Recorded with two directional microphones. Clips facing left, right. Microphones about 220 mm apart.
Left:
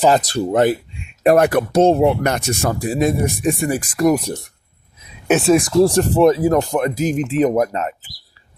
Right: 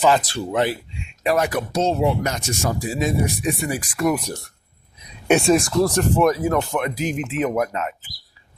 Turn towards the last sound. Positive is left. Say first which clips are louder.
# left 5 dB
turn(degrees=35)  # may be behind; listen again after turning